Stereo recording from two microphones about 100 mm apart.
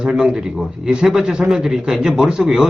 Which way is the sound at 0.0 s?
5° right (ahead or behind).